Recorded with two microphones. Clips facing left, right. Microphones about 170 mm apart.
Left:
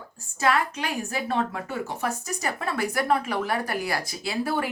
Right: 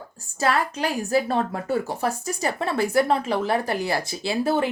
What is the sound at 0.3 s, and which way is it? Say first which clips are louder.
A woman's voice: right 1 dB; 35° right (ahead or behind).